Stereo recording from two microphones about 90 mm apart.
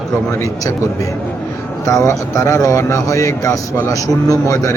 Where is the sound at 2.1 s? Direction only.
35° left (ahead or behind).